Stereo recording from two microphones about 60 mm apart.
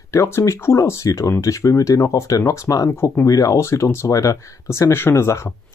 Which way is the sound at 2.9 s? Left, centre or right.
Left.